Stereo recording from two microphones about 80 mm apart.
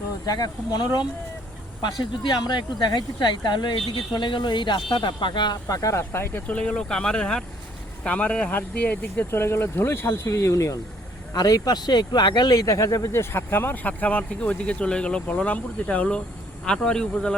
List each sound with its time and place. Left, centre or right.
0.3 s speech: left
1.8 s speech: left
5.6 s speech: left
6.0 s speech: left
6.6 s speech: centre
9.3 s speech: left; by 17.3 s centre